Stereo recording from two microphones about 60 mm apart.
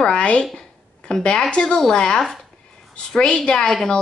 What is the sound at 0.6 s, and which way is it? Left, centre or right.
A woman's voice, centre.